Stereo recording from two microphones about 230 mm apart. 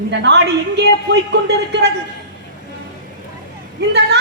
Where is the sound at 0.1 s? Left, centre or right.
Right.